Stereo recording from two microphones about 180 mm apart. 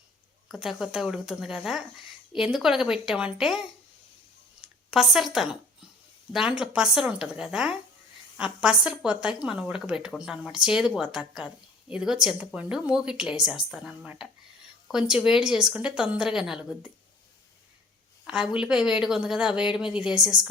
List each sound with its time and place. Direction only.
0.4 s speech: centre (ahead or behind)
4.6 s speech: centre (ahead or behind)
18.3 s speech: 5° right (ahead or behind)